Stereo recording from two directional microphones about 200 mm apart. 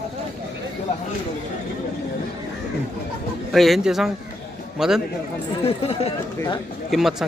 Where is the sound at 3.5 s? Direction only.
Centre (ahead or behind).